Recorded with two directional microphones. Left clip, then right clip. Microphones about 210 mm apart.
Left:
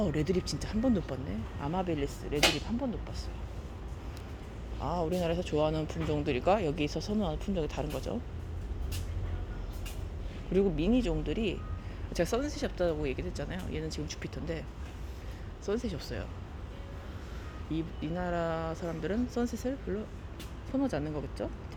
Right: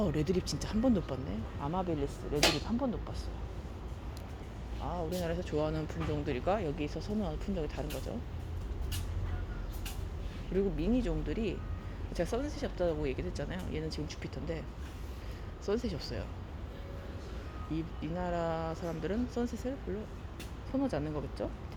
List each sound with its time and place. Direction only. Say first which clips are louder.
0.0 s speech: left 1 dB; 5° left (ahead or behind)
4.8 s speech: left 5 dB; 30° left (ahead or behind)
10.5 s speech: left 4 dB; 25° left (ahead or behind)
15.6 s speech: even; centre (ahead or behind)
17.7 s speech: left 3 dB; 15° left (ahead or behind)
20.8 s speech: left 1 dB; 10° left (ahead or behind)